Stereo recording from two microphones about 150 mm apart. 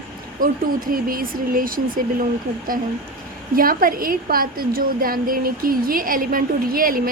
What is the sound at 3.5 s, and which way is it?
A woman's voice, 70° right (ahead or behind).